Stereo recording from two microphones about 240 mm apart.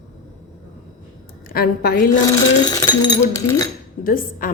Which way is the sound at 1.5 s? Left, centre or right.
Left.